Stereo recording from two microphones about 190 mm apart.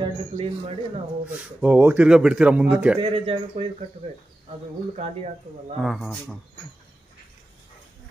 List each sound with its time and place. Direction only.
0.0 s speech: 30° right (ahead or behind)
1.2 s speech: 5° right (ahead or behind)
3.0 s speech: 30° right (ahead or behind)
4.9 s speech: 35° right (ahead or behind)
5.8 s speech: centre (ahead or behind)